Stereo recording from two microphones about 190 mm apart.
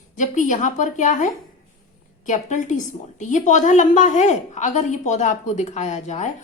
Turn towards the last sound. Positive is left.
turn(degrees=35)  # may be behind; listen again after turning